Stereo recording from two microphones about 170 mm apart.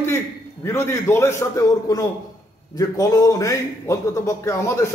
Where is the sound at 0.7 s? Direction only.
15° left (ahead or behind).